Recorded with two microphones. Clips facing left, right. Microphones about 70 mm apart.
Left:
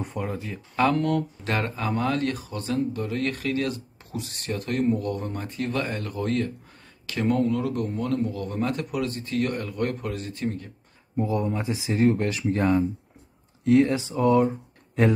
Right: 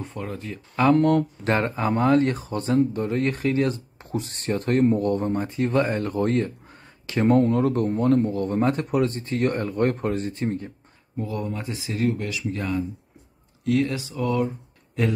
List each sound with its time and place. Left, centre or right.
0.0 s speech: centre
0.9 s speech: right
1.5 s speech: right
11.1 s speech: left